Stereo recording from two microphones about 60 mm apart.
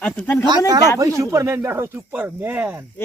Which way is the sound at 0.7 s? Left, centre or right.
Right.